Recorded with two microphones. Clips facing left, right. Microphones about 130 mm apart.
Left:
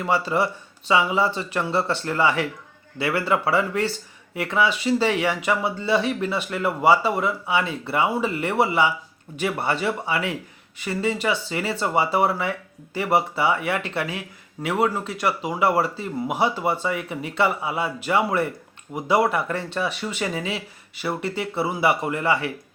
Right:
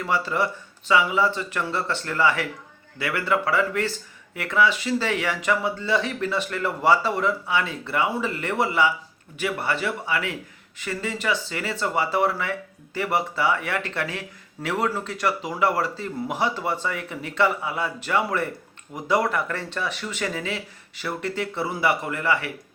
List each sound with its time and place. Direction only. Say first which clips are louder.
0.0 s speech: left 2 dB; 20° left (ahead or behind)
15.8 s speech: left 2 dB; 15° left (ahead or behind)
19.7 s speech: left 3 dB; 25° left (ahead or behind)
21.8 s speech: left 2 dB; 20° left (ahead or behind)